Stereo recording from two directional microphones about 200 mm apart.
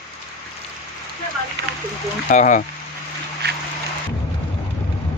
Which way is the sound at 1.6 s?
60° right (ahead or behind).